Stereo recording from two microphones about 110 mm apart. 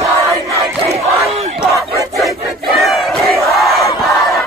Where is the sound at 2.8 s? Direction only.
Centre (ahead or behind).